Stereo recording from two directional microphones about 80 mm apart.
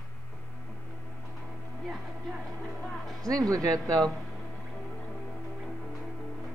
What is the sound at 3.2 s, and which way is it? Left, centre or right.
Speech, right.